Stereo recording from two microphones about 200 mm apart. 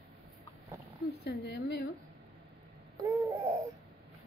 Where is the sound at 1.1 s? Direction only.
55° left (ahead or behind).